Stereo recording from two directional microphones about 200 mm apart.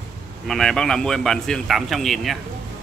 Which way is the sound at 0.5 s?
Centre (ahead or behind).